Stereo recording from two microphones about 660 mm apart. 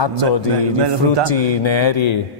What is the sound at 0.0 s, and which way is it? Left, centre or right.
Speech, left.